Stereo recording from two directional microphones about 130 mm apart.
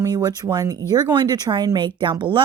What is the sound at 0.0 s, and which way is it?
Speech, 30° right (ahead or behind).